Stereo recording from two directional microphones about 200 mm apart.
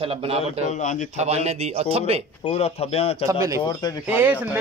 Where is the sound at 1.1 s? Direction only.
35° right (ahead or behind).